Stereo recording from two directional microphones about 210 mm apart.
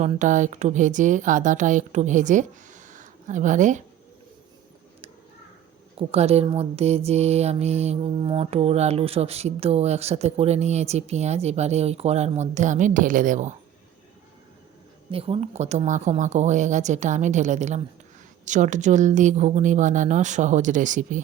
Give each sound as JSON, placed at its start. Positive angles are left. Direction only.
{"t": 0.0, "sound": "speech", "side_deg": -35}
{"t": 6.0, "sound": "speech", "side_deg": -30}
{"t": 15.1, "sound": "speech", "side_deg": -30}